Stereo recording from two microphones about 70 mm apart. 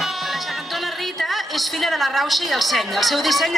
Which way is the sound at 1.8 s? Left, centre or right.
Centre.